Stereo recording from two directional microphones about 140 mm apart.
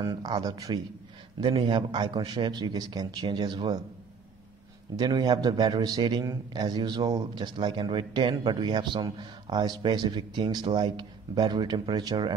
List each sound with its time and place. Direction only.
0.0 s a man's voice: 30° right (ahead or behind)
4.9 s a man's voice: 30° right (ahead or behind)